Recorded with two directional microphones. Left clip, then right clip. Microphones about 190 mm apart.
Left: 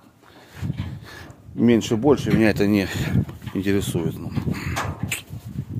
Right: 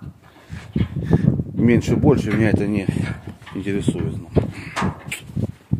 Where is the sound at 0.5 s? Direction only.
Centre (ahead or behind).